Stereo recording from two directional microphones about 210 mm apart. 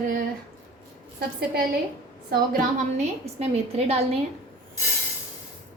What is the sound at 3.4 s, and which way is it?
Speech, 30° right (ahead or behind).